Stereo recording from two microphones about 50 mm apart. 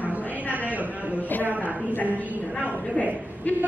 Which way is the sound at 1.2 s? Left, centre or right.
Left.